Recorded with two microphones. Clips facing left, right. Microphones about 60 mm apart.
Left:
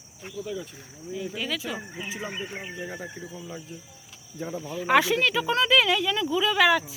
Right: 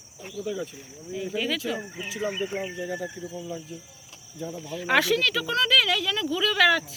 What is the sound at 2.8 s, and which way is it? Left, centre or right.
Speech, left.